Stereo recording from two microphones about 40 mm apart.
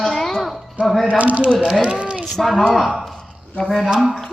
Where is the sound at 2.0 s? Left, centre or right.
Right.